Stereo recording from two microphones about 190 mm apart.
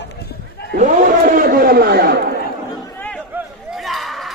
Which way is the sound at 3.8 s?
Centre (ahead or behind).